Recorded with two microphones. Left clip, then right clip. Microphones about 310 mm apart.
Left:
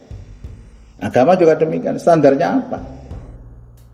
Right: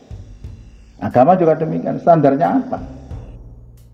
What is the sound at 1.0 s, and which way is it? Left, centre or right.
Speech, centre.